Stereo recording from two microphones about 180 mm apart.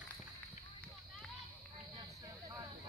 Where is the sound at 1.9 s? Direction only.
25° right (ahead or behind).